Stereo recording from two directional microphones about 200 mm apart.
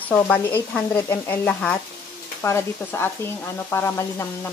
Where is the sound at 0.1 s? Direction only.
10° left (ahead or behind).